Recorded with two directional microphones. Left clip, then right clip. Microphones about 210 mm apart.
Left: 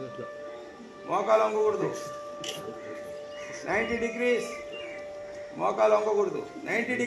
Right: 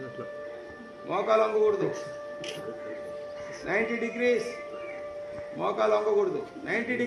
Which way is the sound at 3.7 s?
45° right (ahead or behind).